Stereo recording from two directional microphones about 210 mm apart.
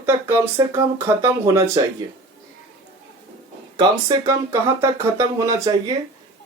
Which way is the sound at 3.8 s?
15° right (ahead or behind).